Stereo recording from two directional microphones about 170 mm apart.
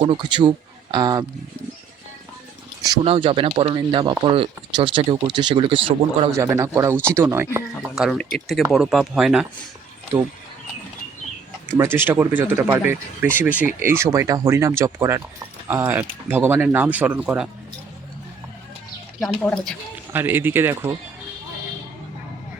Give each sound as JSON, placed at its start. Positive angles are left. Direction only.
{"t": 0.0, "sound": "speech", "side_deg": -30}
{"t": 3.0, "sound": "speech", "side_deg": -35}
{"t": 6.3, "sound": "speech", "side_deg": -15}
{"t": 7.8, "sound": "speech", "side_deg": -5}
{"t": 11.7, "sound": "speech", "side_deg": -15}
{"t": 19.2, "sound": "speech", "side_deg": 5}
{"t": 20.1, "sound": "speech", "side_deg": -10}